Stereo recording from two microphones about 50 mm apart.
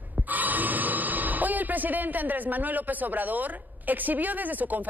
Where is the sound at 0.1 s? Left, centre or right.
Right.